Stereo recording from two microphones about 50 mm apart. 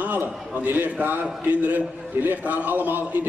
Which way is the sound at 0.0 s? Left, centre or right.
Right.